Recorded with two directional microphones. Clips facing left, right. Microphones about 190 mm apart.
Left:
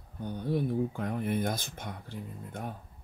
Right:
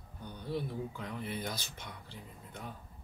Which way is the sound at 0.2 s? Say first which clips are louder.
Left 7 dB; 50° left (ahead or behind).